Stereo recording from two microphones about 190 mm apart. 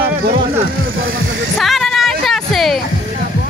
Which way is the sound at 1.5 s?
Centre (ahead or behind).